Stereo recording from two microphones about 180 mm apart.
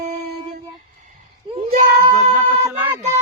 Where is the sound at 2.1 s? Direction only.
15° right (ahead or behind).